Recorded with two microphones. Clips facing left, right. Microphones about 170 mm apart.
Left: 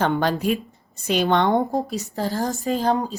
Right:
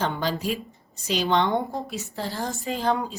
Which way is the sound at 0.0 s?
60° left (ahead or behind).